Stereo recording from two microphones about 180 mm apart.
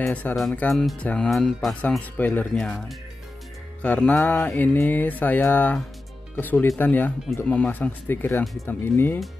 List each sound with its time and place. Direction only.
0.0 s speech: 10° left (ahead or behind)